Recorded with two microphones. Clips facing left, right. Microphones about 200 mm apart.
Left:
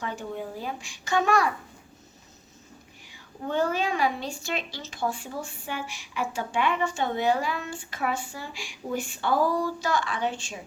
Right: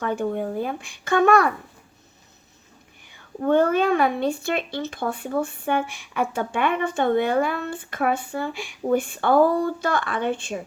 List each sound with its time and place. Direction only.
0.0 s speech: 55° right (ahead or behind)
3.4 s speech: 55° right (ahead or behind)